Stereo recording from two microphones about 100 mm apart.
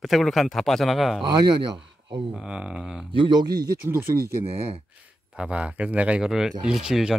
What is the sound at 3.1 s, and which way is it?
Speech, 50° right (ahead or behind).